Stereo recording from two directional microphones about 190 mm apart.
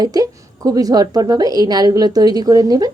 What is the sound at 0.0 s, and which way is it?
A woman's voice, 20° right (ahead or behind).